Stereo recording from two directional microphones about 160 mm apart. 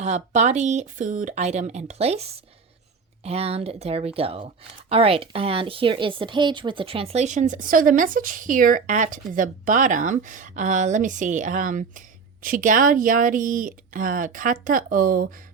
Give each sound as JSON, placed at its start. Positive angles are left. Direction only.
{"t": 0.0, "sound": "speech", "side_deg": -45}